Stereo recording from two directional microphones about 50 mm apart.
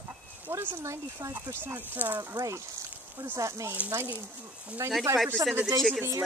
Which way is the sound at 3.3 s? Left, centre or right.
Right.